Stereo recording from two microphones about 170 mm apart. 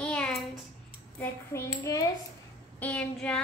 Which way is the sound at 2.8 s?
10° left (ahead or behind).